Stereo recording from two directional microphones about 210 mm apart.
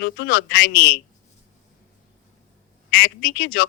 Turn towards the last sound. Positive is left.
turn(degrees=45)  # may be behind; listen again after turning